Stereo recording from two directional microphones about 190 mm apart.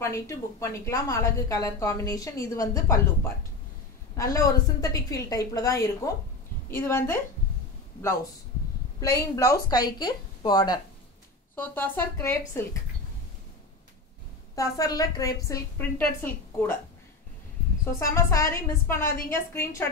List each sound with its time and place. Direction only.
0.0 s a woman's voice: 15° left (ahead or behind)
4.2 s a woman's voice: 15° left (ahead or behind)
9.0 s speech: 15° left (ahead or behind)
11.5 s a woman's voice: 10° left (ahead or behind)
14.5 s a woman's voice: 20° left (ahead or behind)
18.1 s a woman's voice: 15° left (ahead or behind)